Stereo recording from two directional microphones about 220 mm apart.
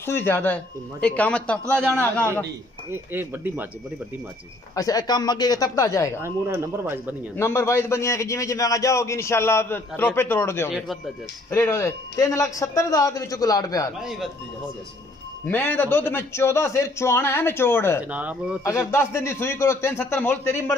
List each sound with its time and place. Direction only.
0.0 s a man's voice: 10° left (ahead or behind)
2.9 s speech: 10° right (ahead or behind)
4.7 s a man's voice: 15° left (ahead or behind)
6.2 s speech: 10° right (ahead or behind)
7.3 s a man's voice: 10° left (ahead or behind)
15.4 s a man's voice: 10° left (ahead or behind)
18.1 s speech: 5° right (ahead or behind)
18.6 s a man's voice: 10° left (ahead or behind)